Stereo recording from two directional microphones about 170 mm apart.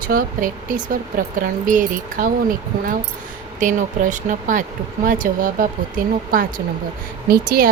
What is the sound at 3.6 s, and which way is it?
Speech, 50° right (ahead or behind).